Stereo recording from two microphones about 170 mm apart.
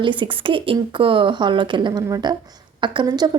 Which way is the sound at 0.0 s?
30° right (ahead or behind).